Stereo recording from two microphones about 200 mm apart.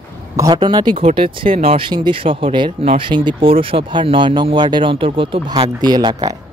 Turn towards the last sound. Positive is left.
turn(degrees=-20)  # may be behind; listen again after turning